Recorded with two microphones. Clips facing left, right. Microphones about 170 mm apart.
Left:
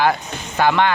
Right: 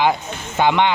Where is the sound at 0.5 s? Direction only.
20° right (ahead or behind).